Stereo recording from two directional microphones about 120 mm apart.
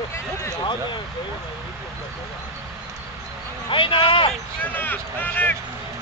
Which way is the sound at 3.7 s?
45° left (ahead or behind).